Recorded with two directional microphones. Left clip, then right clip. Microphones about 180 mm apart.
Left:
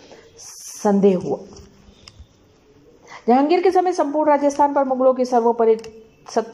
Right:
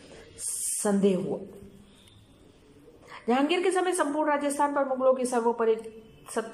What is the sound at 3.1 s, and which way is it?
A woman's voice, 30° left (ahead or behind).